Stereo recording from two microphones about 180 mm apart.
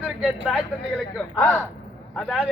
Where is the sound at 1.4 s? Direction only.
5° left (ahead or behind).